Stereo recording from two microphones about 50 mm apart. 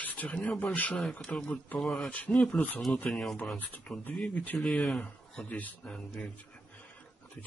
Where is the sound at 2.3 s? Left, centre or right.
Centre.